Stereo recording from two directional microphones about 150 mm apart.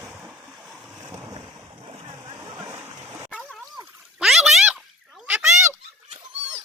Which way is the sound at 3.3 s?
10° left (ahead or behind).